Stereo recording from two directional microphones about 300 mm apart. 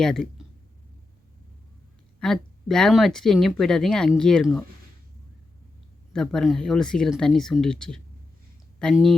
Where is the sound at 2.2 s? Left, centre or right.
Centre.